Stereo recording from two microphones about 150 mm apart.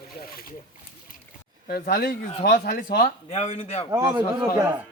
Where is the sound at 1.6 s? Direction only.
80° left.